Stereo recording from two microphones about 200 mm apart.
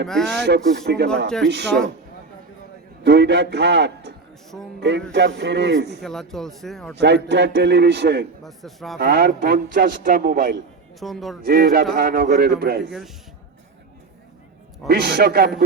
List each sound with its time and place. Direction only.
0.1 s speech: centre (ahead or behind)
0.3 s a man's voice: 60° right (ahead or behind)
3.0 s a man's voice: 60° right (ahead or behind)
6.0 s speech: centre (ahead or behind)
6.9 s a man's voice: 60° right (ahead or behind)
8.4 s speech: centre (ahead or behind)
9.0 s a man's voice: 45° right (ahead or behind)
11.0 s speech: centre (ahead or behind)
11.4 s a man's voice: 50° right (ahead or behind)
14.8 s a man's voice: 50° right (ahead or behind)